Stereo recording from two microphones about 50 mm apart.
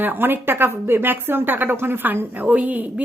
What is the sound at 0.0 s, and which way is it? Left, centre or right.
A woman's voice, right.